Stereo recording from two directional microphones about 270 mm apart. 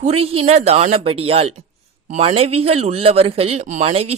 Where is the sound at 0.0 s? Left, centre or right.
Right.